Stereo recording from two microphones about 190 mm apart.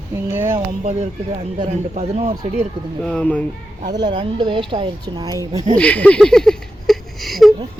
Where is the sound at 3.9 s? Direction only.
20° right (ahead or behind).